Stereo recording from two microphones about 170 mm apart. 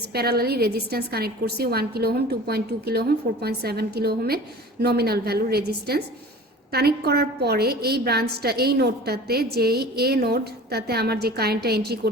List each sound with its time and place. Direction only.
0.1 s a woman's voice: 70° right (ahead or behind)